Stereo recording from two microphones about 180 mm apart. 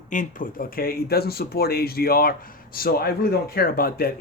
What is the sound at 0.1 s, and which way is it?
Speech, 45° left (ahead or behind).